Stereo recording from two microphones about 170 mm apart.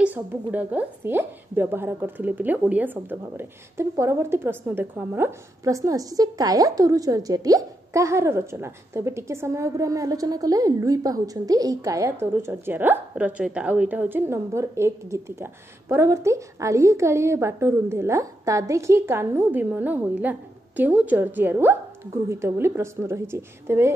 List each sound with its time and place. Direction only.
0.0 s a woman's voice: 10° right (ahead or behind)